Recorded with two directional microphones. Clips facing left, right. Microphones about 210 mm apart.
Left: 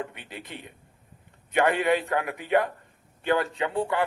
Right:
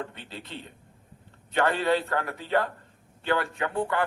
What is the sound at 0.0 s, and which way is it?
A man's voice, 15° left (ahead or behind).